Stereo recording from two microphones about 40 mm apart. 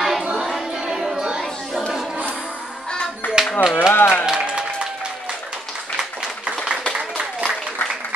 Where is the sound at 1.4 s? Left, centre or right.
Centre.